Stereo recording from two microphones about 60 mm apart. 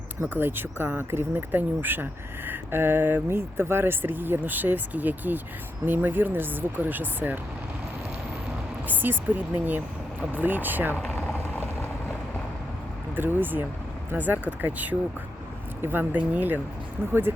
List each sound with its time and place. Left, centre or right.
0.2 s speech: right
8.9 s speech: right
13.1 s speech: right